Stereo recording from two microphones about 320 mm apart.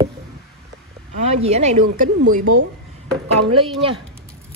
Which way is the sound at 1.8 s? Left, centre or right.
Right.